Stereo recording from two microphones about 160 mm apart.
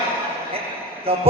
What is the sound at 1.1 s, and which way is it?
Speech, 35° right (ahead or behind).